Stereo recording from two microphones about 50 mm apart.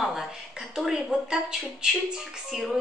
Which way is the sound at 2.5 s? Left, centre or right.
Centre.